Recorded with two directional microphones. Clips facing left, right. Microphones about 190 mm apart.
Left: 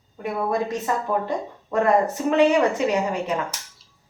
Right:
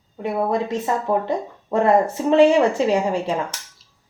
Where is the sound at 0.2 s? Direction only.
25° right (ahead or behind).